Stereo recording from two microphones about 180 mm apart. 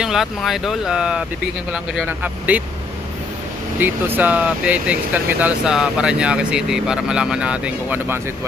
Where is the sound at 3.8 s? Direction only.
10° right (ahead or behind).